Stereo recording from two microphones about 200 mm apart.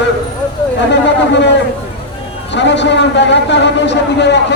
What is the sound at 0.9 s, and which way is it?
A man's voice, 60° left (ahead or behind).